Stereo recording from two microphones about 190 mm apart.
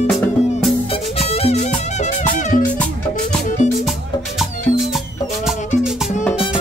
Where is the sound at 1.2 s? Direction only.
35° left (ahead or behind).